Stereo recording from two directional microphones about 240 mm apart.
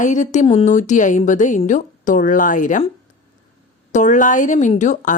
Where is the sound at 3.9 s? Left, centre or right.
Left.